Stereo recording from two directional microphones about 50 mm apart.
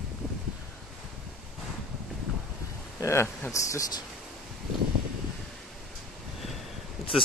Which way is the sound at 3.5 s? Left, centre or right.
Left.